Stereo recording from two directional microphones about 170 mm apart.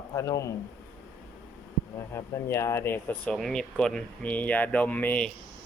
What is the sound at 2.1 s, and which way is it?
Speech, 15° left (ahead or behind).